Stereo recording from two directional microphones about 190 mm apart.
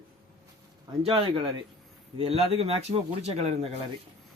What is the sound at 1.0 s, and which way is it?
Speech, 30° right (ahead or behind).